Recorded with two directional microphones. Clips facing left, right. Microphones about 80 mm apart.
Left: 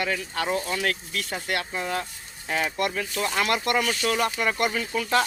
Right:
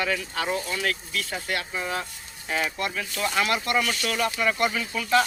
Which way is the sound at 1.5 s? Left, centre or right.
Left.